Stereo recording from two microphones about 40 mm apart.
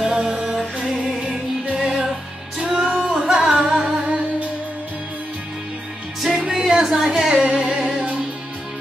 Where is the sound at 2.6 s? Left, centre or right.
Centre.